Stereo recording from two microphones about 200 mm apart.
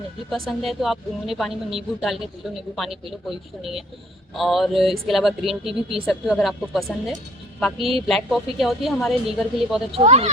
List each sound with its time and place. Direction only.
0.6 s speech: centre (ahead or behind)
9.9 s speech: 30° right (ahead or behind)